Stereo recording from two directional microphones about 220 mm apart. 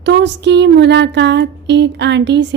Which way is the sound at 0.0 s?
50° right (ahead or behind).